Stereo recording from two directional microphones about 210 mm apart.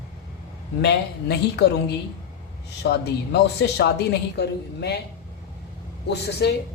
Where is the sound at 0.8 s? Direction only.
50° left (ahead or behind).